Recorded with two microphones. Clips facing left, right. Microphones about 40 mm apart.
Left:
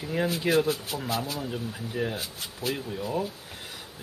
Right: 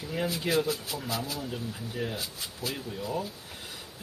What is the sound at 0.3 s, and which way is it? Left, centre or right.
Speech, left.